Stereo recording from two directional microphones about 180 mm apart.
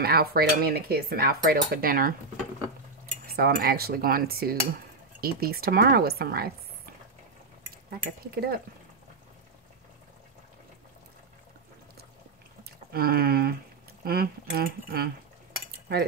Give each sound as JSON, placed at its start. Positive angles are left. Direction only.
{"t": 0.0, "sound": "cutlery", "side_deg": -60}
{"t": 3.3, "sound": "cutlery", "side_deg": -60}
{"t": 8.2, "sound": "cutlery", "side_deg": -60}
{"t": 12.9, "sound": "cutlery", "side_deg": -55}